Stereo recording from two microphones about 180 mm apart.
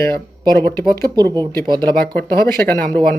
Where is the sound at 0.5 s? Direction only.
15° left (ahead or behind).